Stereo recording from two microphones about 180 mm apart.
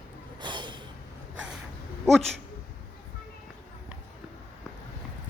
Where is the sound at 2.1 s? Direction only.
Centre (ahead or behind).